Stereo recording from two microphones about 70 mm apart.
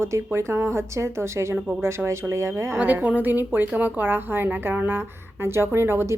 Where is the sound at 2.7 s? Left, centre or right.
Right.